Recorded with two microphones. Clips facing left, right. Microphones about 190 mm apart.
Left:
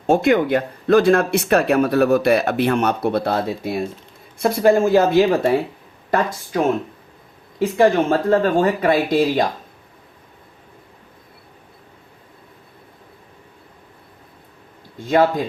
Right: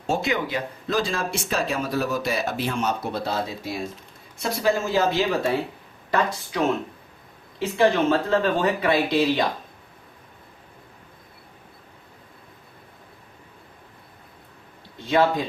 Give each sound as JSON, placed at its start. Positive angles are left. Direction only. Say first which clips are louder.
{"t": 0.1, "sound": "speech", "louder": "left 9 dB", "side_deg": 55}
{"t": 7.8, "sound": "speech", "louder": "left 4 dB", "side_deg": 50}
{"t": 14.9, "sound": "speech", "louder": "left 4 dB", "side_deg": 45}